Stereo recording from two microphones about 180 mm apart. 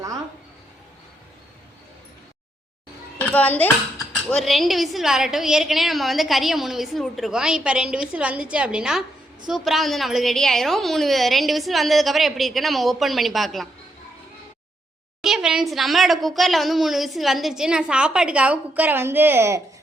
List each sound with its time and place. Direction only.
3.2 s speech: 10° left (ahead or behind)
15.2 s speech: 5° right (ahead or behind)